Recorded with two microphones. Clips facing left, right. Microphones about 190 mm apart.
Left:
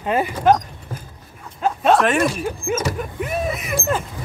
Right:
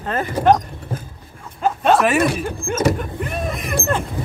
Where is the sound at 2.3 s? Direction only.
5° left (ahead or behind).